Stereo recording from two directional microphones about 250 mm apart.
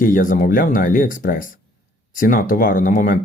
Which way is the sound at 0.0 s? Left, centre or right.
Left.